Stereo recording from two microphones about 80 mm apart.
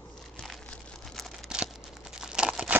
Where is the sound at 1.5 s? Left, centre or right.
Centre.